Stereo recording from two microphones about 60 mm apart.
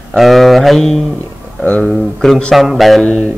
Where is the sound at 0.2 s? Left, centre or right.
Centre.